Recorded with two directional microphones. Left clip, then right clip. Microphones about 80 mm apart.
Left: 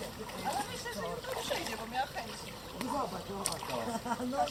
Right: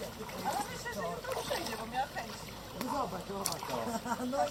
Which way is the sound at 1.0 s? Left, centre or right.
Centre.